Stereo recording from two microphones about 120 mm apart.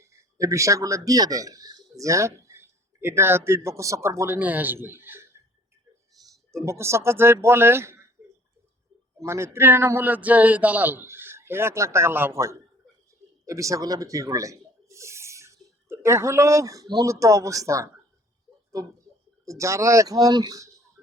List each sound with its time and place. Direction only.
0.0 s speech: 25° right (ahead or behind)
6.5 s speech: 25° right (ahead or behind)
9.1 s speech: 20° right (ahead or behind)